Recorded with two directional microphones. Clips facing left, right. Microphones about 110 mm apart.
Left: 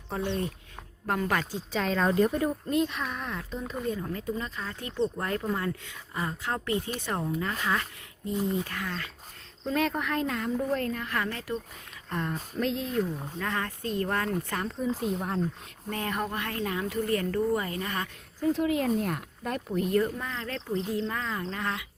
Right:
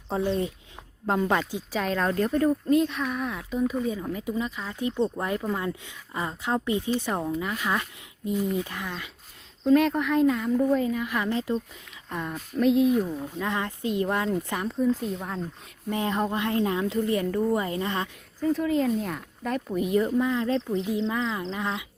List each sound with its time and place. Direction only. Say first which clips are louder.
0.1 s a woman's voice: right 4 dB; 25° right (ahead or behind)
1.7 s a woman's voice: even; centre (ahead or behind)
8.4 s speech: right 1 dB; 20° left (ahead or behind)
8.6 s speech: even; 15° right (ahead or behind)
9.6 s a woman's voice: right 7 dB; centre (ahead or behind); by 11.5 s 20° right (ahead or behind)
12.0 s a woman's voice: even; 5° right (ahead or behind)
15.0 s a woman's voice: left 2 dB; 5° left (ahead or behind)
15.9 s a woman's voice: right 5 dB; 20° right (ahead or behind)
18.4 s speech: right 1 dB; 15° left (ahead or behind)
18.9 s a woman's voice: even; centre (ahead or behind)
19.9 s speech: right 6 dB; 15° right (ahead or behind)